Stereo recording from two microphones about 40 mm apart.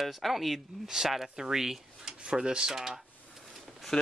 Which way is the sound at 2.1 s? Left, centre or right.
Right.